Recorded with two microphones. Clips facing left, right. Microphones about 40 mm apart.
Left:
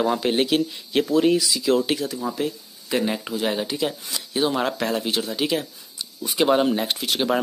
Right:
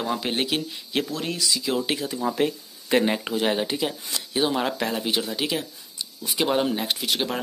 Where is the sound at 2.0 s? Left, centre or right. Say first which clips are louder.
Even; centre.